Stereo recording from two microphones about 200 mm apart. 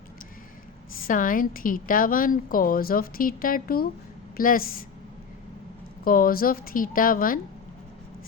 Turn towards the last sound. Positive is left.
turn(degrees=45)  # may be behind; listen again after turning